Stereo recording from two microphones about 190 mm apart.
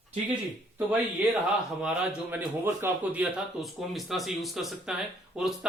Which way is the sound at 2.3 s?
10° right (ahead or behind).